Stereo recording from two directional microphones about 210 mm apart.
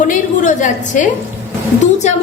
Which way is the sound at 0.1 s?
35° left (ahead or behind).